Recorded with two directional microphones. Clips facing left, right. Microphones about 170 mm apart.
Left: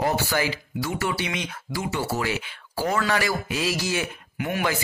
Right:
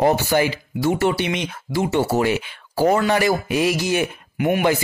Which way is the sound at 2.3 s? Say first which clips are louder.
Right 8 dB; 55° right (ahead or behind).